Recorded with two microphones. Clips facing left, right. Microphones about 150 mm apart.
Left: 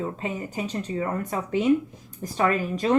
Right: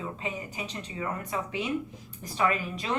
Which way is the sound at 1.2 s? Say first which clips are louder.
Left 7 dB; 45° left (ahead or behind).